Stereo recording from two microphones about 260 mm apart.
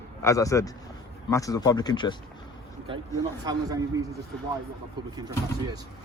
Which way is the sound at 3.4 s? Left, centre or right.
Centre.